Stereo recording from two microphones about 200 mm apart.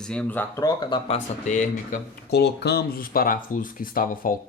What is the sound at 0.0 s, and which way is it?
Speech, 5° left (ahead or behind).